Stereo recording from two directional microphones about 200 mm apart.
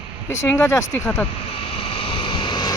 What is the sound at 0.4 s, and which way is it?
Speech, 15° left (ahead or behind).